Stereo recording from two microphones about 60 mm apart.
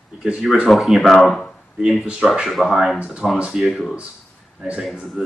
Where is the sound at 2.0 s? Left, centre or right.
Centre.